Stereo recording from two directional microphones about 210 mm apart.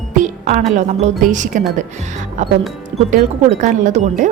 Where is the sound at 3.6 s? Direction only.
35° right (ahead or behind).